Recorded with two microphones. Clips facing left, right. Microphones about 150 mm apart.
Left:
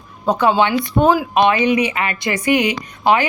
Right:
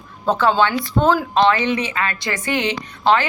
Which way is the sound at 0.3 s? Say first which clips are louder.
Left 2 dB; 15° left (ahead or behind).